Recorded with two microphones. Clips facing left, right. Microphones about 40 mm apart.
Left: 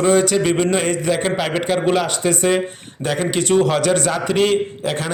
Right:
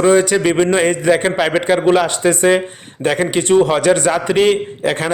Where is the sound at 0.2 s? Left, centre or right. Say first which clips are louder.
Right 3 dB; right.